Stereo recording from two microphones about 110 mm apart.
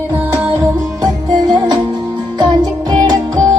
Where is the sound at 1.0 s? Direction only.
40° right (ahead or behind).